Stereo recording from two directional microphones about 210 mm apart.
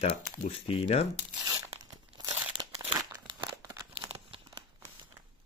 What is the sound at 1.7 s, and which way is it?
Crumpling, 20° right (ahead or behind).